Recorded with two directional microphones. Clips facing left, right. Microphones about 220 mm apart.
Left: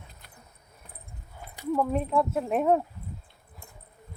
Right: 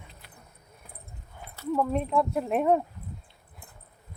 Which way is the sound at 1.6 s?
10° left (ahead or behind).